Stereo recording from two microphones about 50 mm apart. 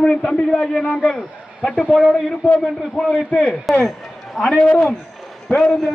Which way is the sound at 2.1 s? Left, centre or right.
Centre.